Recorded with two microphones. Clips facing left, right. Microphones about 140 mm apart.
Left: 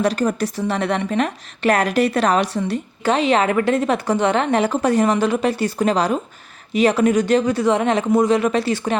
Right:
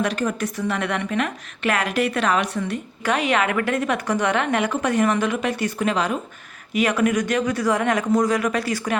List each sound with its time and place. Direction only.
0.0 s a woman's voice: 35° left (ahead or behind)